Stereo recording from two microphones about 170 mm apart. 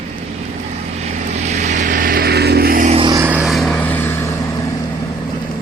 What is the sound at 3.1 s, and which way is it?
Vehicle, 10° right (ahead or behind).